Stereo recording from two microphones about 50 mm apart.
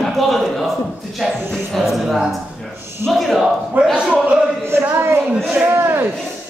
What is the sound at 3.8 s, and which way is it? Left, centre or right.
Speech, right.